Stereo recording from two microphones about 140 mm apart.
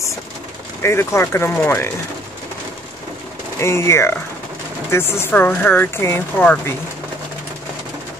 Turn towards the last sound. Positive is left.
turn(degrees=10)  # may be behind; listen again after turning